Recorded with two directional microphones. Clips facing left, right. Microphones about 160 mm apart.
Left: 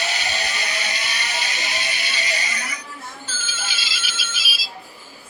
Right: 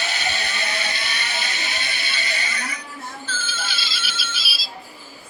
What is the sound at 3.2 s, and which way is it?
Ringtone, 40° left (ahead or behind).